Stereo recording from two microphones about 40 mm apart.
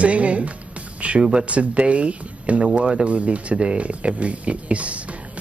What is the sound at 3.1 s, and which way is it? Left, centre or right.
Speech, right.